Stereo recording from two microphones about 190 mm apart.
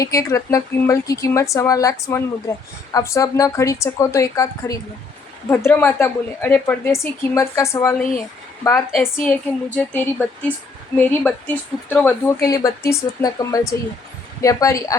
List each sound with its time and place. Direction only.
0.0 s a woman's voice: 15° left (ahead or behind)
9.1 s a woman's voice: 5° left (ahead or behind)